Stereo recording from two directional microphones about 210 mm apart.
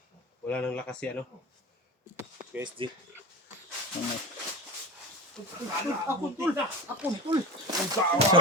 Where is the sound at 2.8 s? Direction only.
25° right (ahead or behind).